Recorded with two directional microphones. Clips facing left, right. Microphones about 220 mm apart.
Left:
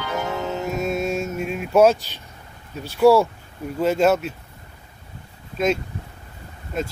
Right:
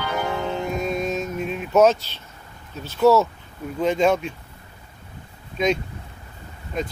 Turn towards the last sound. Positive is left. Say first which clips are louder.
# left 1 dB
turn(degrees=5)  # may be behind; listen again after turning